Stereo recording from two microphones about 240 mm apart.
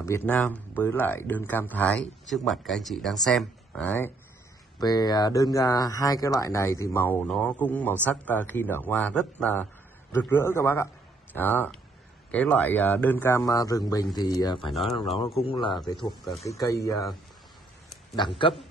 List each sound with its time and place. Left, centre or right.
0.0 s speech: centre
14.7 s speech: centre
15.1 s speech: left
18.1 s speech: centre